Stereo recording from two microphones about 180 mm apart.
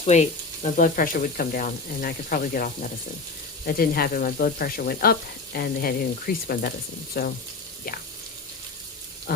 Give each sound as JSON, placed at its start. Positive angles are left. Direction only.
{"t": 0.0, "sound": "frying", "side_deg": 40}
{"t": 3.7, "sound": "speech", "side_deg": 55}